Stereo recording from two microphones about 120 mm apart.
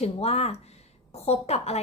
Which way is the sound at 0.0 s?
60° left (ahead or behind).